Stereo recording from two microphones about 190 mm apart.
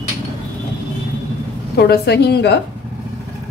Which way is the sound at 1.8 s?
60° left (ahead or behind).